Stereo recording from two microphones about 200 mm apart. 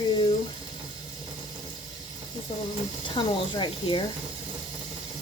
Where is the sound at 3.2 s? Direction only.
25° left (ahead or behind).